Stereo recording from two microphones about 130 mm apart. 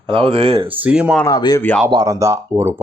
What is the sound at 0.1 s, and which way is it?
Speech, 45° right (ahead or behind).